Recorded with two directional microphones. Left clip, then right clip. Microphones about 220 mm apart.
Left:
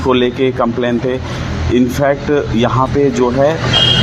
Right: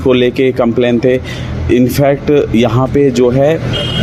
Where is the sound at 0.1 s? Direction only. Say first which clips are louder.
Right 3 dB; 50° right (ahead or behind).